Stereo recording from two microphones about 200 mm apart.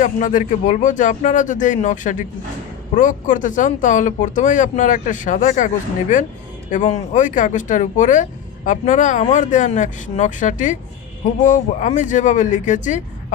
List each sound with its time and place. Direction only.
0.0 s speech: 40° left (ahead or behind)